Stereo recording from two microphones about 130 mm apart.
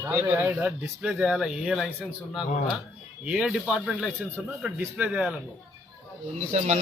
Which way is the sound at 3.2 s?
5° right (ahead or behind).